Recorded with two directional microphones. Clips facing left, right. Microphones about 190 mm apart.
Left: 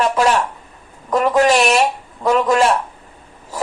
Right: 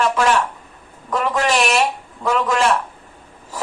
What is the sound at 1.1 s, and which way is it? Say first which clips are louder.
A woman's voice: left 6 dB; 40° left (ahead or behind).